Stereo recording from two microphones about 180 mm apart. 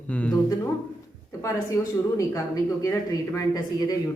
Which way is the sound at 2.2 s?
20° left (ahead or behind).